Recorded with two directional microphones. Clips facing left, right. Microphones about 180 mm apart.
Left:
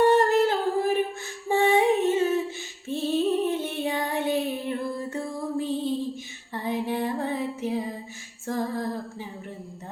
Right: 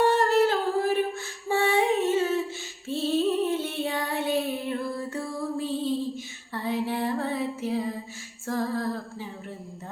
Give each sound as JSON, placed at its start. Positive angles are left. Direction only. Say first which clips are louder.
{"t": 0.1, "sound": "humming", "louder": "left 2 dB", "side_deg": 15}
{"t": 1.5, "sound": "female singing", "louder": "left 3 dB", "side_deg": 15}
{"t": 6.5, "sound": "music", "louder": "even", "side_deg": 15}
{"t": 8.4, "sound": "female singing", "louder": "even", "side_deg": 20}